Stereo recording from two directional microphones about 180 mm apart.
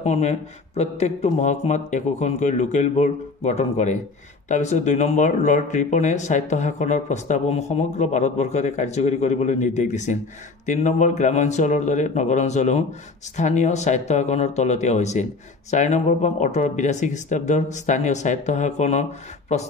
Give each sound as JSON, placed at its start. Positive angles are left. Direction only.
{"t": 0.0, "sound": "speech", "side_deg": 35}